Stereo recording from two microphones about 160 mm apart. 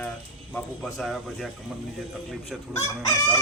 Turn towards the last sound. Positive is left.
turn(degrees=20)  # may be behind; listen again after turning